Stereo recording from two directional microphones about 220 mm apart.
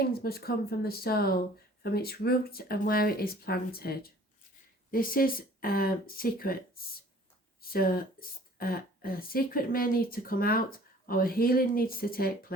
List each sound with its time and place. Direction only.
0.0 s speech: 45° left (ahead or behind)